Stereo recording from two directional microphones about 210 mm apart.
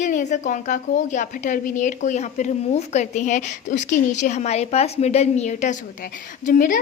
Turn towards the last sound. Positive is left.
turn(degrees=40)  # may be behind; listen again after turning